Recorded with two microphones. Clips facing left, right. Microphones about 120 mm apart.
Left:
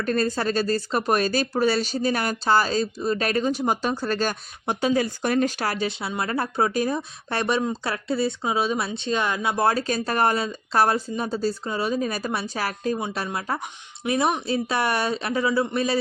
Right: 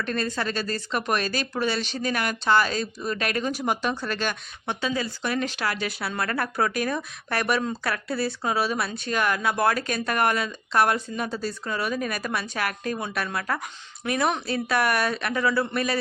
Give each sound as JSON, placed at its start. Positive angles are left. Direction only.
{"t": 0.0, "sound": "speech", "side_deg": 40}
{"t": 6.0, "sound": "speech", "side_deg": 20}